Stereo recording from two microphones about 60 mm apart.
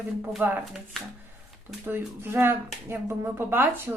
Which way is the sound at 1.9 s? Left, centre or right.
Right.